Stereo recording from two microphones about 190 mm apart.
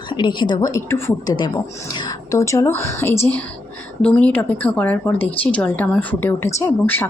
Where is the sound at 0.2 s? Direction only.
25° left (ahead or behind).